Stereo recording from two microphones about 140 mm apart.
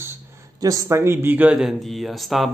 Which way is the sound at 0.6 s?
25° right (ahead or behind).